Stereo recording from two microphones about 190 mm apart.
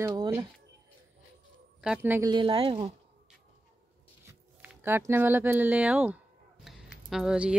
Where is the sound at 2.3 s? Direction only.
25° right (ahead or behind).